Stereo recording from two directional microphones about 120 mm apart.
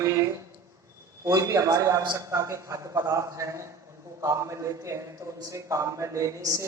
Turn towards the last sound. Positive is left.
turn(degrees=-25)  # may be behind; listen again after turning